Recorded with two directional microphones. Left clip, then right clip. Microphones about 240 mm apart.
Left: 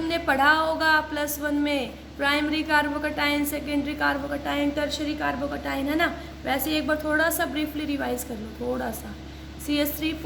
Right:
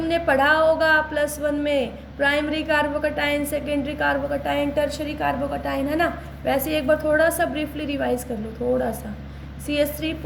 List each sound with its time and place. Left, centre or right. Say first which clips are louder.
0.1 s a woman's voice: right 2 dB; centre
9.6 s a woman's voice: right 3 dB; centre